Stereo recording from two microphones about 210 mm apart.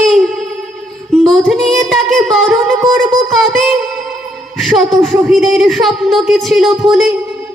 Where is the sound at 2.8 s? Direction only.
15° right (ahead or behind).